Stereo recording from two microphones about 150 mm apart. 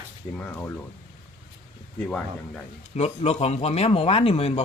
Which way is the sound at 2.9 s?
45° left (ahead or behind).